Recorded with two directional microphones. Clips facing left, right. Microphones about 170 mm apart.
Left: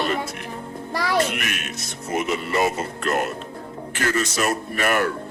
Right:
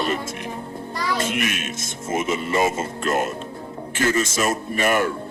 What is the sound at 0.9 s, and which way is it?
Speech, 65° left (ahead or behind).